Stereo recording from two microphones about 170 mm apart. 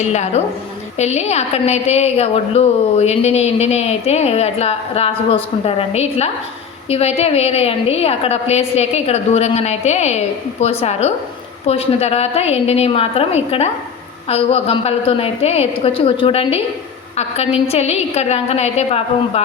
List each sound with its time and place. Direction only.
0.1 s a woman's voice: 40° left (ahead or behind)